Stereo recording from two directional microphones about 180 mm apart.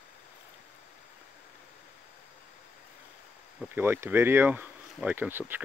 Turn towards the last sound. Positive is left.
turn(degrees=-10)  # may be behind; listen again after turning